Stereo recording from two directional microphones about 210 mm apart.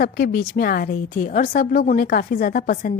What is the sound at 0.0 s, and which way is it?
A woman's voice, 50° left (ahead or behind).